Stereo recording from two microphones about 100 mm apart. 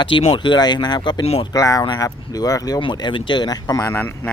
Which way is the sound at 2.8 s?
50° left (ahead or behind).